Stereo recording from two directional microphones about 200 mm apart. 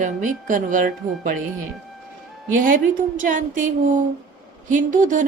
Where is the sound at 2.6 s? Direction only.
40° right (ahead or behind).